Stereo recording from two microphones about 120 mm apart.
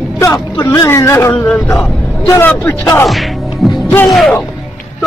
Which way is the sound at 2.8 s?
30° left (ahead or behind).